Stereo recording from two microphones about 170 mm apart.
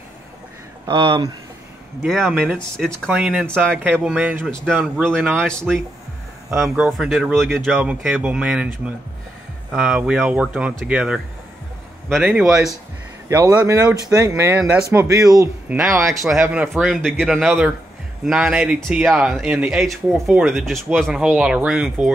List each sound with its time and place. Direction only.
0.8 s speech: 30° right (ahead or behind)
2.2 s speech: 5° right (ahead or behind)
13.3 s speech: 20° right (ahead or behind)
15.8 s speech: centre (ahead or behind)